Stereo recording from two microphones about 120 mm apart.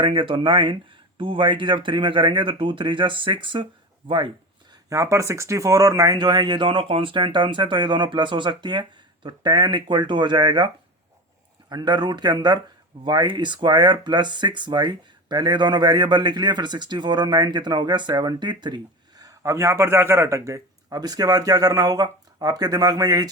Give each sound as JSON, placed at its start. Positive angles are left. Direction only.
{"t": 0.0, "sound": "speech", "side_deg": -45}
{"t": 4.7, "sound": "speech", "side_deg": -25}
{"t": 11.7, "sound": "speech", "side_deg": -35}